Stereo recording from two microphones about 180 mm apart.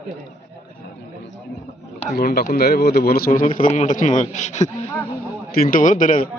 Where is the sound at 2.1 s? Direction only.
60° left (ahead or behind); by 4.7 s 40° left (ahead or behind).